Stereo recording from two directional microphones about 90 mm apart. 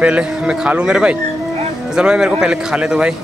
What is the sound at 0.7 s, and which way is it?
Speech, 10° right (ahead or behind).